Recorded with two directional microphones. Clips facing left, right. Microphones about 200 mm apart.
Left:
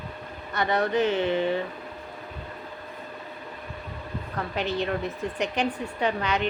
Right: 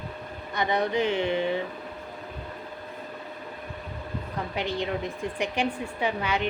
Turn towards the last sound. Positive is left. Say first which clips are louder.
# left 1 dB
turn(degrees=-10)  # may be behind; listen again after turning